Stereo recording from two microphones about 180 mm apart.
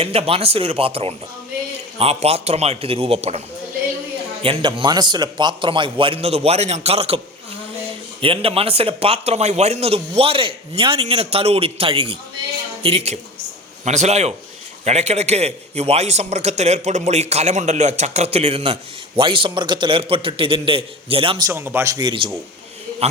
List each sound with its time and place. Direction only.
0.0 s a man's voice: 30° right (ahead or behind)
4.4 s a man's voice: 30° right (ahead or behind)
8.2 s a man's voice: 30° right (ahead or behind)
21.4 s speech: 15° right (ahead or behind)